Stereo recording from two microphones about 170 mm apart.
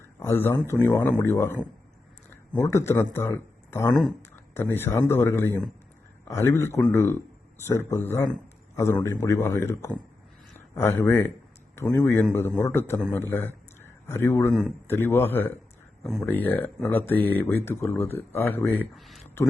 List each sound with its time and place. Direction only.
0.0 s a man's voice: 15° left (ahead or behind)
18.9 s speech: centre (ahead or behind)